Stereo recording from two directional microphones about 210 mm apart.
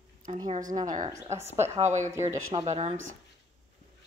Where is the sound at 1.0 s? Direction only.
15° right (ahead or behind).